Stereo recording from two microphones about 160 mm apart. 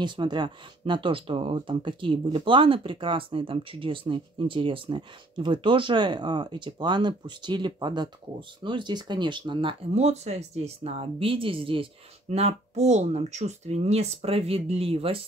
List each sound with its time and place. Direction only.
0.0 s speech: 30° right (ahead or behind)